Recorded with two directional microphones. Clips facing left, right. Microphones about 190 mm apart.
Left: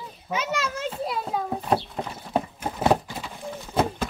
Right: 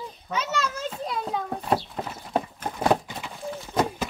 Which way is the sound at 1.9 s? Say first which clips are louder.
Left 1 dB; 5° left (ahead or behind).